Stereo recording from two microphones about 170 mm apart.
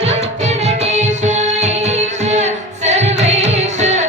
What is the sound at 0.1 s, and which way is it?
Music, 40° right (ahead or behind).